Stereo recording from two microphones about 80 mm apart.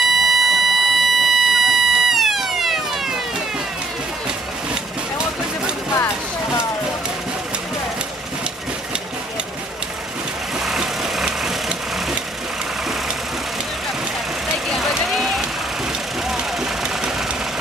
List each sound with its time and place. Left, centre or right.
0.0 s buzzer: centre
5.9 s a sound: left
10.6 s vehicle: centre
14.7 s vehicle: centre